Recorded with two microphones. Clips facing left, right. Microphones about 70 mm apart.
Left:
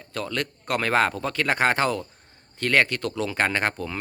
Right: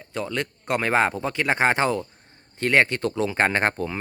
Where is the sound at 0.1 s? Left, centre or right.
Right.